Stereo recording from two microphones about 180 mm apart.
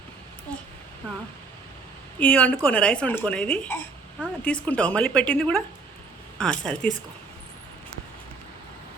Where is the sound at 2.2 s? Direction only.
10° left (ahead or behind).